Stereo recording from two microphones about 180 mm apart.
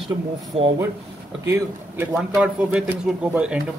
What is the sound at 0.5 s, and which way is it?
Speech, 35° right (ahead or behind).